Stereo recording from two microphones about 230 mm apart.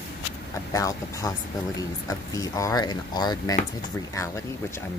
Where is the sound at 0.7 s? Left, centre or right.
Centre.